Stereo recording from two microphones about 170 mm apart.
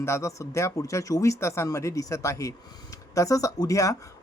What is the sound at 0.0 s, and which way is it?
Speech, 15° left (ahead or behind).